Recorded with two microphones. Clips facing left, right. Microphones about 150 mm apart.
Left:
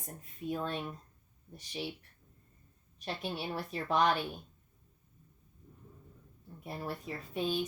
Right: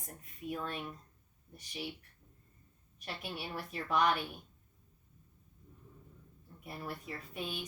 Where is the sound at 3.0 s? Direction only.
30° left (ahead or behind).